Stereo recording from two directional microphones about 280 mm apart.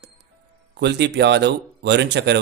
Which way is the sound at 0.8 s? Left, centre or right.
Right.